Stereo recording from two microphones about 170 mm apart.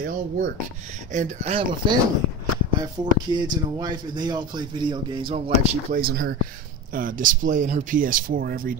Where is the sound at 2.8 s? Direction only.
25° right (ahead or behind).